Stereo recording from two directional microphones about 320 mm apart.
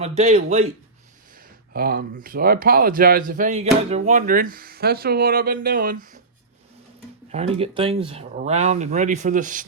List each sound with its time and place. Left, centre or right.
0.0 s speech: centre
1.7 s speech: right
7.3 s speech: centre